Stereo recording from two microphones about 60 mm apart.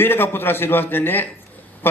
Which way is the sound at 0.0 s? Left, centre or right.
Left.